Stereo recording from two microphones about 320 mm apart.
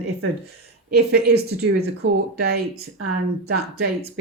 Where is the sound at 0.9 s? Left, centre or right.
Right.